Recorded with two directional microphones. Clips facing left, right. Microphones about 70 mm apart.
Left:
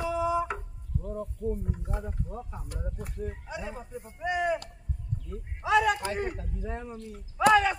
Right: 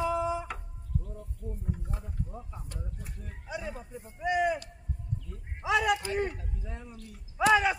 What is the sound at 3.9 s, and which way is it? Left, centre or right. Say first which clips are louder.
Speech: right 2 dB; centre.